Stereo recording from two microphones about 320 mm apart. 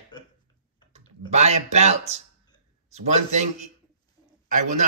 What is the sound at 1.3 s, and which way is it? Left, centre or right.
Speech, right.